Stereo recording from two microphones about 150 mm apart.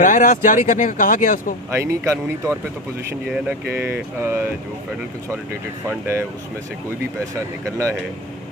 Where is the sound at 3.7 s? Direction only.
15° right (ahead or behind).